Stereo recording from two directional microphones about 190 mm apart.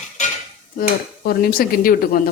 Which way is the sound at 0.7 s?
50° left (ahead or behind).